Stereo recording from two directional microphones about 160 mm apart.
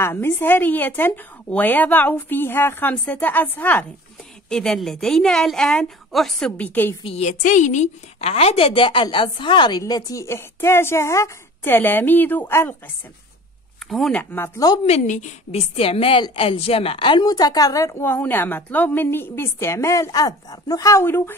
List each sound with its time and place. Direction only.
0.0 s a woman's voice: 15° left (ahead or behind)
7.0 s a woman's voice: 40° left (ahead or behind); by 12.9 s 15° left (ahead or behind)
13.8 s a woman's voice: centre (ahead or behind)
14.3 s a woman's voice: 15° left (ahead or behind)
14.9 s a woman's voice: 45° left (ahead or behind); by 21.4 s 15° left (ahead or behind)